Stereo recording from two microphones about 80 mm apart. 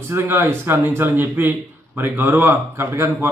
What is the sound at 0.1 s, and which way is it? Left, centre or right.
A man's voice, right.